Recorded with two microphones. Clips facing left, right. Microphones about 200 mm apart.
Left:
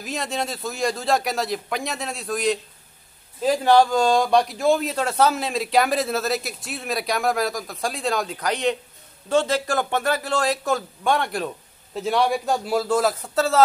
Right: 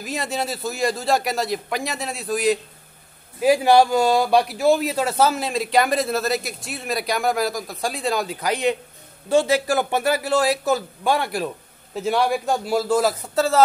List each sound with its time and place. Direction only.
0.0 s speech: 5° right (ahead or behind)